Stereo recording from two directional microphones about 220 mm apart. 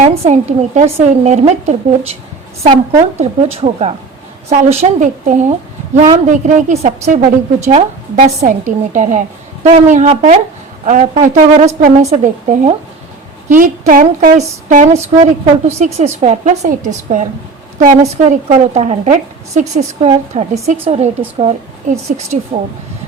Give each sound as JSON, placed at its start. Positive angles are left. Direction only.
{"t": 0.0, "sound": "speech", "side_deg": -30}
{"t": 3.2, "sound": "a woman's voice", "side_deg": -30}